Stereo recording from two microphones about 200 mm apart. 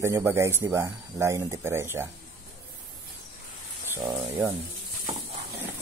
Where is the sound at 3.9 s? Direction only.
20° right (ahead or behind).